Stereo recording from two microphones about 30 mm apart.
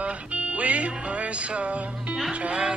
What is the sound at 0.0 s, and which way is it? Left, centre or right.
Music, right.